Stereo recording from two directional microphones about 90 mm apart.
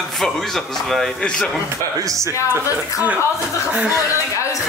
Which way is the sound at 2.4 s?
20° right (ahead or behind).